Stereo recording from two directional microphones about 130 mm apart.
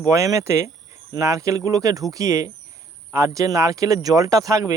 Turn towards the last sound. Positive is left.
turn(degrees=-25)  # may be behind; listen again after turning